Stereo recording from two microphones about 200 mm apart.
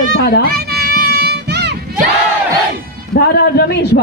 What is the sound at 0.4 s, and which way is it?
Crowd, 50° right (ahead or behind).